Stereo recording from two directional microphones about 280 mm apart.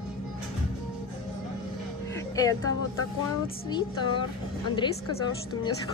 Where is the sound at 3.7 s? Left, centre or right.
Centre.